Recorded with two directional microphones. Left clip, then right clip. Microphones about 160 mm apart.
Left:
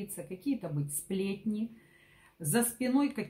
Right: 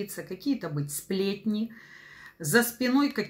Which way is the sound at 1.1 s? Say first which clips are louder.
Right 6 dB; 5° right (ahead or behind).